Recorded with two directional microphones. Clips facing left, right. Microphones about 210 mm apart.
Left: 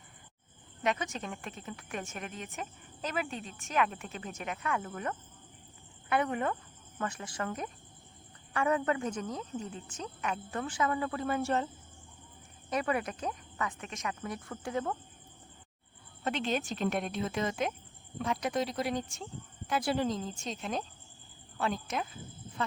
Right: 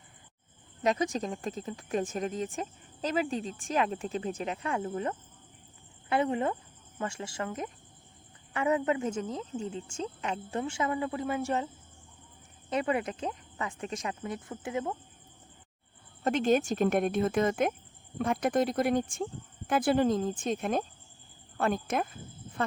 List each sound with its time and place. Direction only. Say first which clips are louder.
0.8 s a woman's voice: right 5 dB; 35° right (ahead or behind); by 11.7 s 15° right (ahead or behind)
12.7 s a woman's voice: right 2 dB; 25° right (ahead or behind)
16.2 s speech: right 7 dB; 45° right (ahead or behind)